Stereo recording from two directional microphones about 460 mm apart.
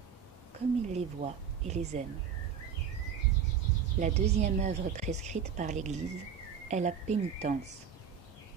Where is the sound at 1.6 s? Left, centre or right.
Centre.